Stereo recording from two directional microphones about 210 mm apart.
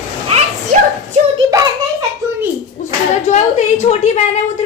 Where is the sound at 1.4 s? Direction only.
15° right (ahead or behind).